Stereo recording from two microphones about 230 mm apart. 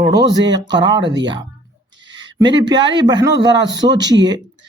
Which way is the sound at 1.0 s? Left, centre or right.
Right.